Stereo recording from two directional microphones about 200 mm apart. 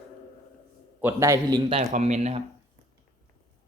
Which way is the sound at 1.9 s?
35° right (ahead or behind).